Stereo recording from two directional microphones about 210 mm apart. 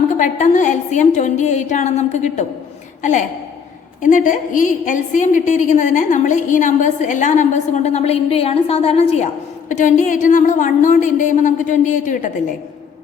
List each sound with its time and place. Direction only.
0.2 s a woman's voice: 35° left (ahead or behind)